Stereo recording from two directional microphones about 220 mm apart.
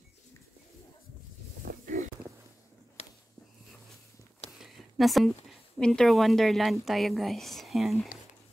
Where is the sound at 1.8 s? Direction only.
35° right (ahead or behind).